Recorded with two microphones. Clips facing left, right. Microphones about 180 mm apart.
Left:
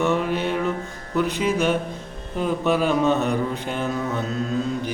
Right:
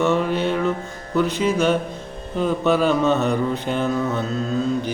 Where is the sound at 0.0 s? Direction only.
10° left (ahead or behind).